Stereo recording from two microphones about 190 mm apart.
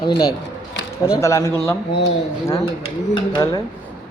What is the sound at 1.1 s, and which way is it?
A man's voice, 15° left (ahead or behind).